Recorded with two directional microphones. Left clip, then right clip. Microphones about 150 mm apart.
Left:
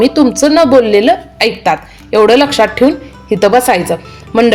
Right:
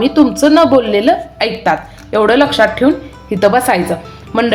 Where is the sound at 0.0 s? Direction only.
30° left (ahead or behind).